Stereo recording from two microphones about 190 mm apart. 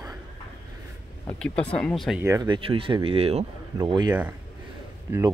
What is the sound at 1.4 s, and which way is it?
Speech, 5° left (ahead or behind).